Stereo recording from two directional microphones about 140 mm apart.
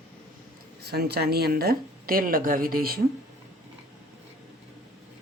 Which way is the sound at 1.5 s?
90° right.